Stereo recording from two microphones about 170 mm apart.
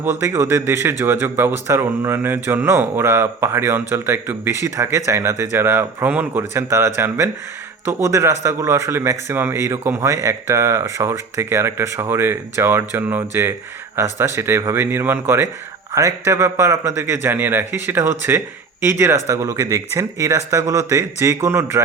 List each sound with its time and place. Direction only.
0.0 s a man's voice: 15° right (ahead or behind)